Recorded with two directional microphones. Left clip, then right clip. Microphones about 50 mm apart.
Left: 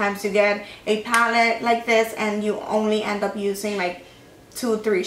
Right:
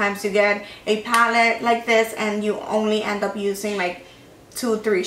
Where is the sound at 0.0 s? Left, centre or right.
Centre.